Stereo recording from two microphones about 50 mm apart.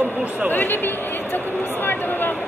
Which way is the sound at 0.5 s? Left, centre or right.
Left.